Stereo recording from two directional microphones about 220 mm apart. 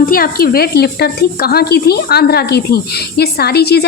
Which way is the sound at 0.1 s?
40° left (ahead or behind).